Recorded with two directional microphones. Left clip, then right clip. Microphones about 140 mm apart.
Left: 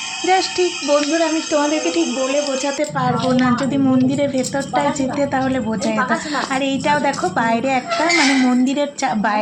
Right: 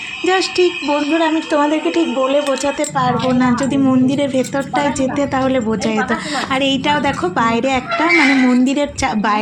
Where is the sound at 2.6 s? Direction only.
Centre (ahead or behind).